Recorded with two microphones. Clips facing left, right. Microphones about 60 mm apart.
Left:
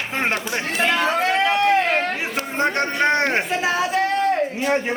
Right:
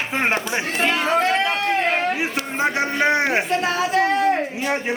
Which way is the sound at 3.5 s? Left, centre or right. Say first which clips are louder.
Right 1 dB; centre.